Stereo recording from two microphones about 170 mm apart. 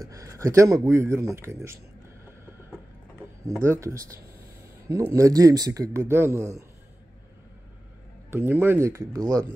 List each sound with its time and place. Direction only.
0.1 s speech: 20° right (ahead or behind)
3.4 s speech: 15° right (ahead or behind)
8.3 s speech: 15° right (ahead or behind)